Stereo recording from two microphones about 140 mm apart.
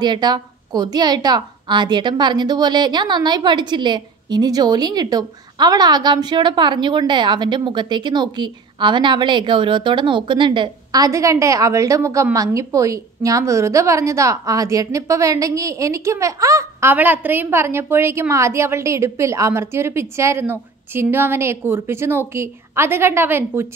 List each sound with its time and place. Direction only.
0.0 s a woman's voice: 30° right (ahead or behind); by 23.7 s 15° right (ahead or behind)